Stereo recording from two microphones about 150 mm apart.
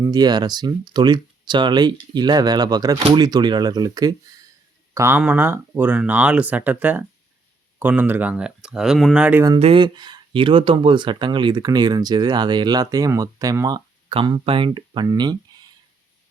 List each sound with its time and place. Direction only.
0.0 s speech: 25° right (ahead or behind); by 9.4 s 5° right (ahead or behind)
9.6 s speech: 35° right (ahead or behind)
14.1 s speech: 35° right (ahead or behind)